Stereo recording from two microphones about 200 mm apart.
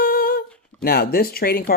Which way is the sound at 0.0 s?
45° left (ahead or behind).